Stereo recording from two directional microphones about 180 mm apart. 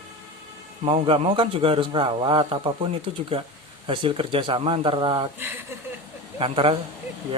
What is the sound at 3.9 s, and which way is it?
Speech, 30° right (ahead or behind).